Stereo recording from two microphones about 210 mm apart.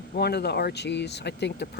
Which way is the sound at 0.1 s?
50° left (ahead or behind).